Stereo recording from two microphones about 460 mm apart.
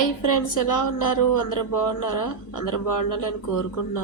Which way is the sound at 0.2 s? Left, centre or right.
Left.